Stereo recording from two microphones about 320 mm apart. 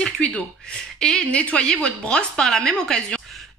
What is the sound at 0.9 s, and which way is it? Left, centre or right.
Speech, centre.